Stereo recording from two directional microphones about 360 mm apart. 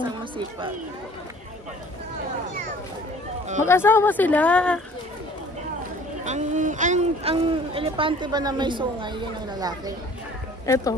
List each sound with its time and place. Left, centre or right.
0.0 s speech: centre
3.6 s a woman's voice: centre
6.2 s speech: centre
10.7 s speech: centre